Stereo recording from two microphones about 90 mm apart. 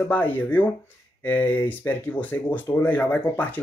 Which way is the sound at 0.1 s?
20° left (ahead or behind).